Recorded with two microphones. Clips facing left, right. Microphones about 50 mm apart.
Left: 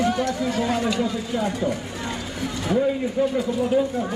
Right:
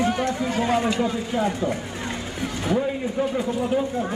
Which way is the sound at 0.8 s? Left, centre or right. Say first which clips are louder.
Even; right.